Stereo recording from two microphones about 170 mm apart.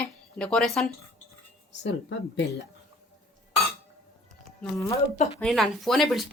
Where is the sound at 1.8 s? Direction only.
90° left.